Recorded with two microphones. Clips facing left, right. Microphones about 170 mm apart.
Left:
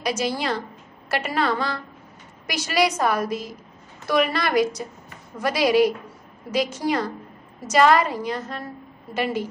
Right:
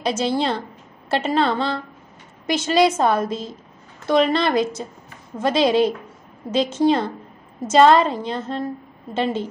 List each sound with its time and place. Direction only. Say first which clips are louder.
0.0 s a woman's voice: right 4 dB; 25° right (ahead or behind)